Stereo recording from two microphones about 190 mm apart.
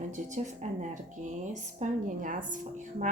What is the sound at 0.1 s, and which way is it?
Speech, 40° right (ahead or behind).